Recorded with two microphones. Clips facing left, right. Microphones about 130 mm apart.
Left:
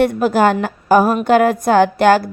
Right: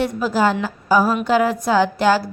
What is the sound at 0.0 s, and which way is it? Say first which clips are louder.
A woman's voice: left 5 dB; 60° left (ahead or behind).